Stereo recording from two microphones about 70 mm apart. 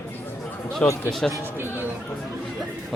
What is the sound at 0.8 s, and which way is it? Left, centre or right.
Speech, centre.